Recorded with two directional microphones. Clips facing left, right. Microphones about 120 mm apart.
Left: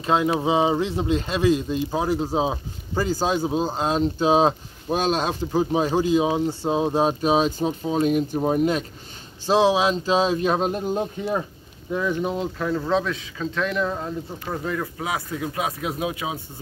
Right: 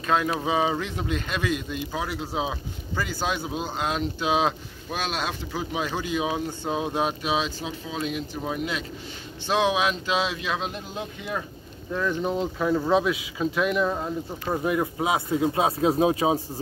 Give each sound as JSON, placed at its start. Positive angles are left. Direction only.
{"t": 0.0, "sound": "speech", "side_deg": 25}
{"t": 9.5, "sound": "speech", "side_deg": 30}
{"t": 11.9, "sound": "speech", "side_deg": 10}